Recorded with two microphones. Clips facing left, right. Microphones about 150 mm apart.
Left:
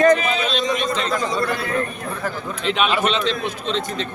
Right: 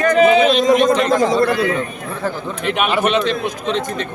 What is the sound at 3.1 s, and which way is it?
A man's voice, 55° right (ahead or behind).